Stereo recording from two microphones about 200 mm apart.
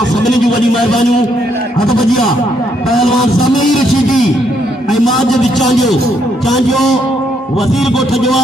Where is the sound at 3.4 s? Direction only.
20° left (ahead or behind).